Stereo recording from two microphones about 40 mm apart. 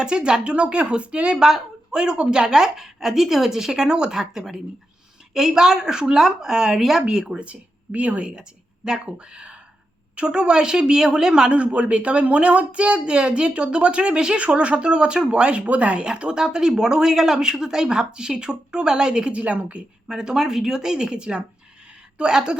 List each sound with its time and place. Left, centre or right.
0.0 s speech: right
1.4 s a woman's voice: centre
7.3 s speech: right
8.2 s speech: centre
11.5 s speech: right
16.0 s speech: right
19.3 s a woman's voice: right
20.1 s a woman's voice: centre